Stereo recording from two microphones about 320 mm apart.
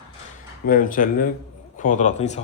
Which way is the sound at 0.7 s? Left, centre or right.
Left.